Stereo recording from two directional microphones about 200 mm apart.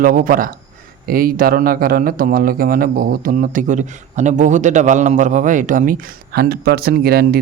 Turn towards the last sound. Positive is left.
turn(degrees=-50)  # may be behind; listen again after turning